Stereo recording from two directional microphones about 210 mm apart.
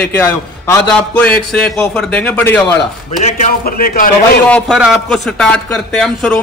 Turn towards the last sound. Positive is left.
turn(degrees=5)  # may be behind; listen again after turning